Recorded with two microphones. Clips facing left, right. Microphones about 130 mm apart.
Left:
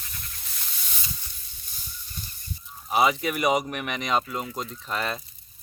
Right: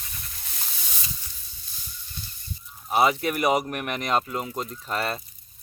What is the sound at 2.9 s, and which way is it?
Speech, centre (ahead or behind).